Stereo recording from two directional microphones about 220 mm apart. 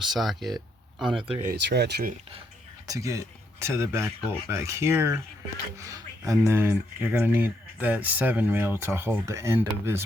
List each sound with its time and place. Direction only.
0.1 s speech: centre (ahead or behind)
1.3 s speech: 40° right (ahead or behind)
2.8 s speech: 15° right (ahead or behind)